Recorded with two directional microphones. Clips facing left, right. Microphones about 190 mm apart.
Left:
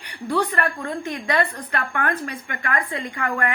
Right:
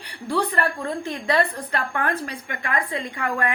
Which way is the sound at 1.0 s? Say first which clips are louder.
Right 1 dB; 30° right (ahead or behind).